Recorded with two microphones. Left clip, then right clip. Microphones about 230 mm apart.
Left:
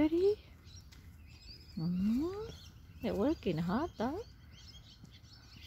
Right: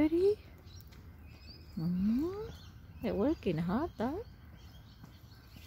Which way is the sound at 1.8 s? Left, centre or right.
Centre.